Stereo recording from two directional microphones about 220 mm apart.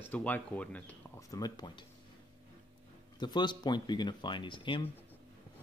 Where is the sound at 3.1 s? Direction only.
20° left (ahead or behind).